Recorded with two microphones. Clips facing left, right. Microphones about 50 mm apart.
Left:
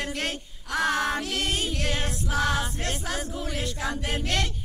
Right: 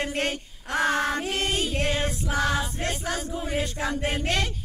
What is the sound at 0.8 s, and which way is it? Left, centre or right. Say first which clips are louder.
Music: right 1 dB; centre.